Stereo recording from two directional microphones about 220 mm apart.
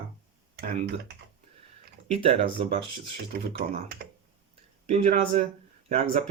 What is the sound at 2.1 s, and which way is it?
Speech, 25° right (ahead or behind).